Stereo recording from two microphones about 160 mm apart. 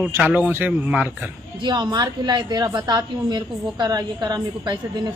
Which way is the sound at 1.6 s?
25° right (ahead or behind).